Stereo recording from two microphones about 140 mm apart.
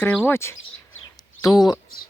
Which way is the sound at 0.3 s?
20° left (ahead or behind).